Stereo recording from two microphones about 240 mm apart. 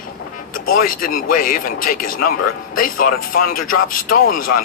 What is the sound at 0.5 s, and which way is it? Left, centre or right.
Music, left.